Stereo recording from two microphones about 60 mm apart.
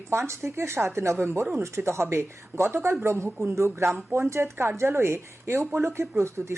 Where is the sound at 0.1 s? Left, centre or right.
Right.